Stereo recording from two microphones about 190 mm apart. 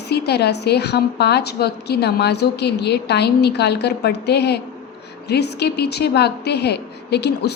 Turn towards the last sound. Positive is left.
turn(degrees=60)  # may be behind; listen again after turning